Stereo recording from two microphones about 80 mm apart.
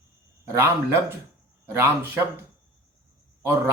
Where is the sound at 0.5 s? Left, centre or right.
Right.